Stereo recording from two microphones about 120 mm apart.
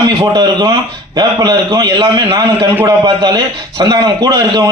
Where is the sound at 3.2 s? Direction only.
35° right (ahead or behind).